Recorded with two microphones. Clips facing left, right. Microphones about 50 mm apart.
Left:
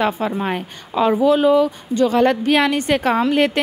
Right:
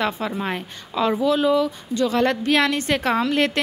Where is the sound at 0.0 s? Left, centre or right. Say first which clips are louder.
Left 4 dB; centre.